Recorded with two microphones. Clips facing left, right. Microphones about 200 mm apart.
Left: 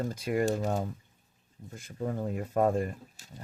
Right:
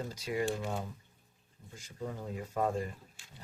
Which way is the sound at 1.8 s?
55° left (ahead or behind).